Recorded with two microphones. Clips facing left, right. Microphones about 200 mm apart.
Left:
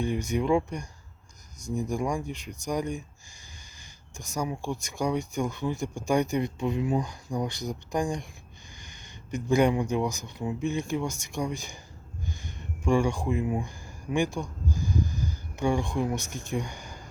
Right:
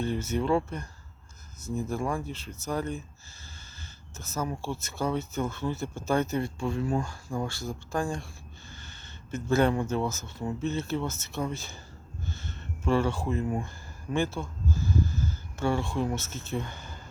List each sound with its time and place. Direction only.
0.0 s speech: 15° left (ahead or behind)
4.2 s speech: 15° left (ahead or behind)